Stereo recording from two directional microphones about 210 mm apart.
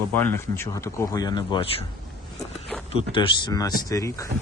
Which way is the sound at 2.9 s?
25° left (ahead or behind).